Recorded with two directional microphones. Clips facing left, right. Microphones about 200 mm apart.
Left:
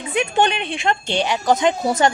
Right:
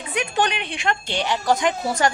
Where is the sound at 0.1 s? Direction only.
25° left (ahead or behind).